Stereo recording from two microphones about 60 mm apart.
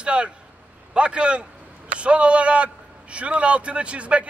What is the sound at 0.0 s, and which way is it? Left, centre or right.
A man's voice, centre.